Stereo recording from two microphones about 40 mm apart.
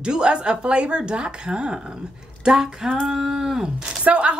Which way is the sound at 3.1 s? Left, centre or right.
Centre.